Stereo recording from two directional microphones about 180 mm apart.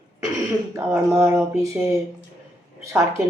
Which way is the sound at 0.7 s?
15° right (ahead or behind).